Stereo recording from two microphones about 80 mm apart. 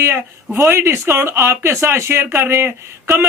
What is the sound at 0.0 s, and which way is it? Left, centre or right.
A man's voice, right.